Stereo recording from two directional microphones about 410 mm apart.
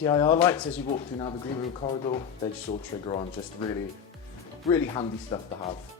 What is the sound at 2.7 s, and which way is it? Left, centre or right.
Speech, centre.